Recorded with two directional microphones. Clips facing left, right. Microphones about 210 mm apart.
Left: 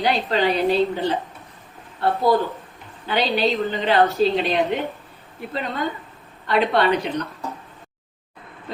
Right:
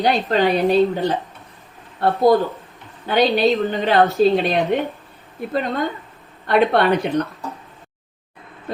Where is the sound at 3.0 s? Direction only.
45° right (ahead or behind).